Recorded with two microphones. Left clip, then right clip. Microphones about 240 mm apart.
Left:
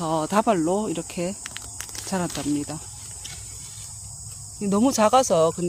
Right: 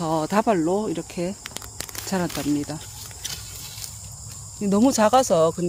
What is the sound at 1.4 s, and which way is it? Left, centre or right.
Snake, centre.